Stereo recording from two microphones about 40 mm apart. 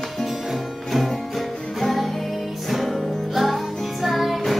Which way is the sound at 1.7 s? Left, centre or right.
Centre.